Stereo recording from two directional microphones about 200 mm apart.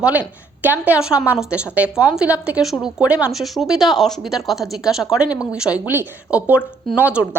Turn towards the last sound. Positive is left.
turn(degrees=-10)  # may be behind; listen again after turning